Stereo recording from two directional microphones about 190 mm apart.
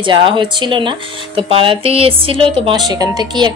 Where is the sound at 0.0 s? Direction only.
25° right (ahead or behind).